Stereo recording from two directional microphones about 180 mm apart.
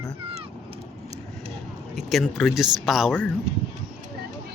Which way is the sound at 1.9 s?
Centre (ahead or behind).